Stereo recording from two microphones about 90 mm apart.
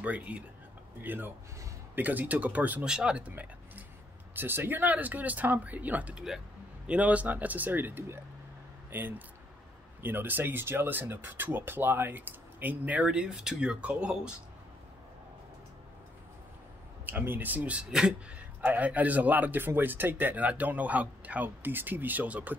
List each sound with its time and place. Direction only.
0.0 s a man's voice: 15° right (ahead or behind)
17.0 s a man's voice: 25° right (ahead or behind)